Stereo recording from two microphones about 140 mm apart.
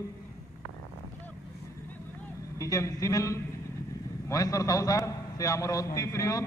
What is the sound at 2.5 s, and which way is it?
A man's voice, 20° left (ahead or behind).